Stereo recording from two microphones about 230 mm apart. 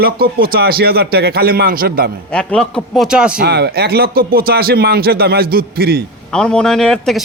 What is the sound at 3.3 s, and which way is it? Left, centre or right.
A man's voice, right.